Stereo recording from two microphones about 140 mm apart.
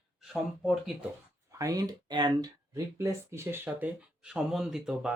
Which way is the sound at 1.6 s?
25° right (ahead or behind).